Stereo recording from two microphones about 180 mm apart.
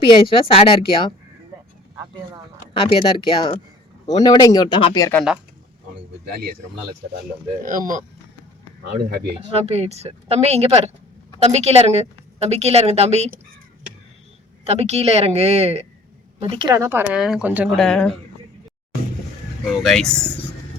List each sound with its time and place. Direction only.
0.1 s a woman's voice: 30° left (ahead or behind)
2.7 s a woman's voice: 30° left (ahead or behind)
6.2 s speech: 55° right (ahead or behind)
7.6 s speech: 45° right (ahead or behind)
8.8 s speech: 60° right (ahead or behind)
9.2 s a woman's voice: 35° right (ahead or behind)
14.6 s a woman's voice: 35° right (ahead or behind)
16.7 s speech: 15° right (ahead or behind)
17.1 s speech: 5° right (ahead or behind)
17.7 s speech: centre (ahead or behind)
19.8 s speech: centre (ahead or behind)